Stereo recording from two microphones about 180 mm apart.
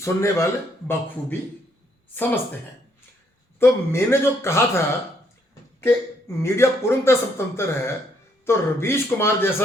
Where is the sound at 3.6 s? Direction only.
15° left (ahead or behind).